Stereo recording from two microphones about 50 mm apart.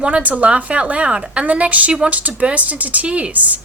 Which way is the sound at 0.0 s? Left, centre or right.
Right.